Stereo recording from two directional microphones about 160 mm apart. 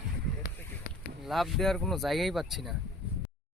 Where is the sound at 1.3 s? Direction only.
Centre (ahead or behind).